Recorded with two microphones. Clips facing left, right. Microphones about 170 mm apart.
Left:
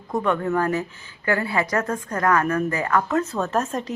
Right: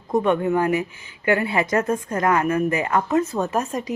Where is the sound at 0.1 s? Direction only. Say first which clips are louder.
Right 3 dB; 20° right (ahead or behind).